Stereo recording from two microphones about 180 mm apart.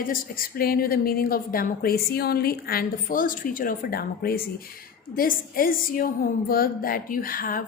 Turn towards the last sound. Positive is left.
turn(degrees=50)  # may be behind; listen again after turning